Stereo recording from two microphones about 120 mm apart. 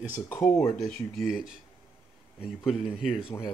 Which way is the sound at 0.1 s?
20° left (ahead or behind).